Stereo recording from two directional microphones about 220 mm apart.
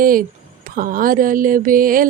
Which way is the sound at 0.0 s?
40° right (ahead or behind).